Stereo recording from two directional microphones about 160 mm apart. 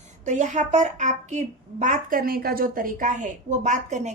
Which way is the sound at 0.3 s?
50° right (ahead or behind).